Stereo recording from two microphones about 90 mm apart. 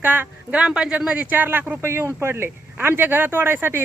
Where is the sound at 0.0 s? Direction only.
20° right (ahead or behind).